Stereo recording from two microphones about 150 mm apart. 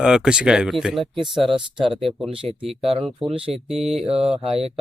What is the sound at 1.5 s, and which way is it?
Speech, 35° right (ahead or behind).